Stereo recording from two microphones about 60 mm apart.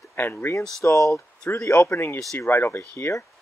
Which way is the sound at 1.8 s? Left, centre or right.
Left.